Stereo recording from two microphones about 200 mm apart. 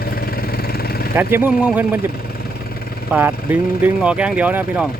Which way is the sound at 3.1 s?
10° right (ahead or behind).